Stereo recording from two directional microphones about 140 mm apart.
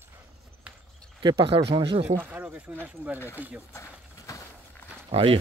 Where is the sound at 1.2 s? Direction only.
35° right (ahead or behind).